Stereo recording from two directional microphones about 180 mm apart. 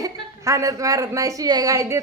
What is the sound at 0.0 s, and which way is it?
A woman's voice, 15° right (ahead or behind).